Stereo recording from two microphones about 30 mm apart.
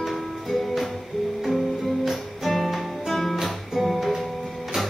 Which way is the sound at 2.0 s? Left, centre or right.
Centre.